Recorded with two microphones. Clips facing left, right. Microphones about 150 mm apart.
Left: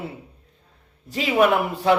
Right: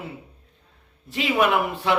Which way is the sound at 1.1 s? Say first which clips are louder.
Left 3 dB; 40° left (ahead or behind).